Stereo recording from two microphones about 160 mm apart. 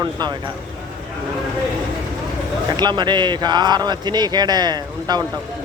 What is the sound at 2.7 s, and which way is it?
Speech, 30° right (ahead or behind).